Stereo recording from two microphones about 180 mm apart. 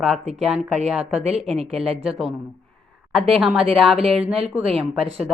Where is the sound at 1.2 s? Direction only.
35° right (ahead or behind).